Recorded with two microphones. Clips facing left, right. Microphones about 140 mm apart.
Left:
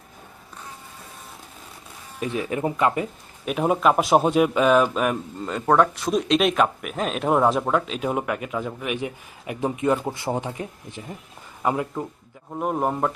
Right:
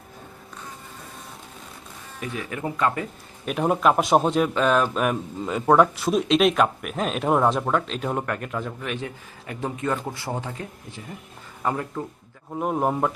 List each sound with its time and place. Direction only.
2.2 s speech: 20° left (ahead or behind)
3.4 s a man's voice: centre (ahead or behind)
12.5 s a man's voice: centre (ahead or behind)